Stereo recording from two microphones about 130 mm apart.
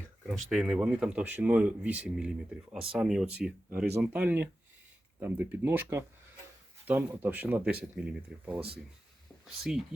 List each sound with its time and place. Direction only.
0.3 s speech: 5° right (ahead or behind)
9.7 s speech: 5° right (ahead or behind)